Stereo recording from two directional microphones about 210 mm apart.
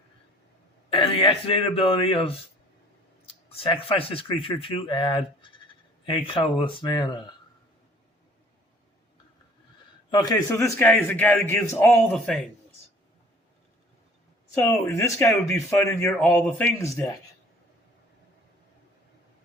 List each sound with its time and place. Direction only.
0.9 s a man's voice: 25° left (ahead or behind)
10.1 s speech: 20° left (ahead or behind)
14.5 s speech: 10° left (ahead or behind)